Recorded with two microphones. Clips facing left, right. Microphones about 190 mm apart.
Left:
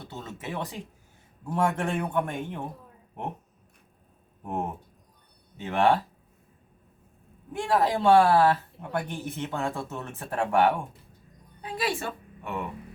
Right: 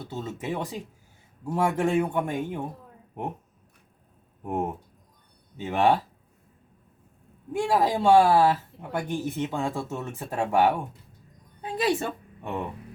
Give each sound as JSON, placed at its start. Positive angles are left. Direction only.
{"t": 0.3, "sound": "speech", "side_deg": -10}
{"t": 4.4, "sound": "speech", "side_deg": -10}
{"t": 7.5, "sound": "speech", "side_deg": -10}
{"t": 11.6, "sound": "a woman's voice", "side_deg": -20}